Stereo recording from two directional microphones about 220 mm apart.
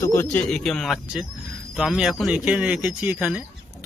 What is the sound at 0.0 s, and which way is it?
Speech, 10° left (ahead or behind).